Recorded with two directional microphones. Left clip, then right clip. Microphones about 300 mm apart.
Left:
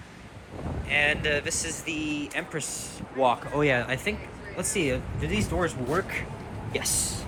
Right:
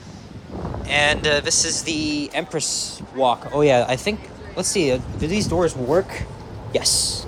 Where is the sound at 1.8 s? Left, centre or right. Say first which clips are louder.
Right 7 dB; right.